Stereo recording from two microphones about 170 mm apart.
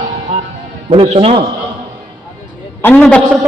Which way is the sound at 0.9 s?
35° right (ahead or behind).